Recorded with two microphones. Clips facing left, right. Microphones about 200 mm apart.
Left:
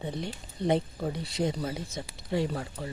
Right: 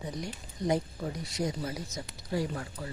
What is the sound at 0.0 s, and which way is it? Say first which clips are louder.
Speech: left 3 dB; 30° left (ahead or behind).